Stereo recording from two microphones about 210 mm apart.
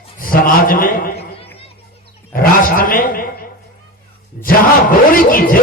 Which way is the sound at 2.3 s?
45° left (ahead or behind).